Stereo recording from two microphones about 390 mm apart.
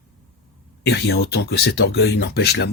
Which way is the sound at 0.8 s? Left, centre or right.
Left.